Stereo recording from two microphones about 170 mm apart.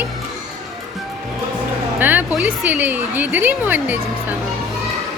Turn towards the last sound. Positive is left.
turn(degrees=-10)  # may be behind; listen again after turning